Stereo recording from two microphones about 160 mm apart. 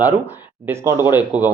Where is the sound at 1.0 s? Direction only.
10° right (ahead or behind).